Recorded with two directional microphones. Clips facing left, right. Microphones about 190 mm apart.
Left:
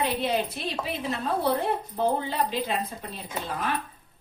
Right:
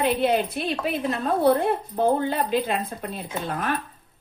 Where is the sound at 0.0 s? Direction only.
55° right (ahead or behind).